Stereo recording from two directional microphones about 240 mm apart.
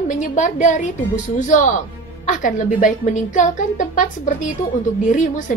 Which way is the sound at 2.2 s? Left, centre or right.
Left.